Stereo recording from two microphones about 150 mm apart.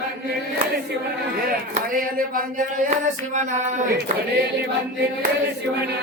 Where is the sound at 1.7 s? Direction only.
65° right (ahead or behind).